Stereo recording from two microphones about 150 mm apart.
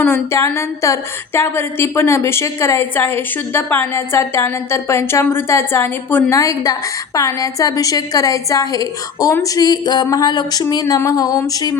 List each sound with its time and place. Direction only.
0.0 s a woman's voice: 15° left (ahead or behind)